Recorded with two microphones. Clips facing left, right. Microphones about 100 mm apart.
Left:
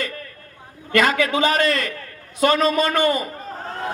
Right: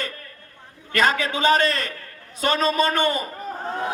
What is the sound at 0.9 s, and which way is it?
A man's voice, 30° right (ahead or behind).